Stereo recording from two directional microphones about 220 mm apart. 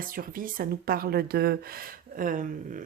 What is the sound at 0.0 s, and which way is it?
A woman's voice, 40° right (ahead or behind).